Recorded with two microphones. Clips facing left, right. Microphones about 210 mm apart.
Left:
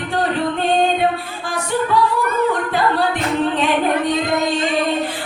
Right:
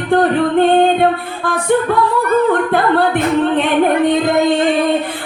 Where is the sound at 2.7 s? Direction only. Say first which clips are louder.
Right 5 dB; 55° right (ahead or behind).